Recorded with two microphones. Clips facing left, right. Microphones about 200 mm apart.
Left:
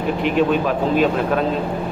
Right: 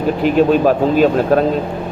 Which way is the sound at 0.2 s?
40° right (ahead or behind).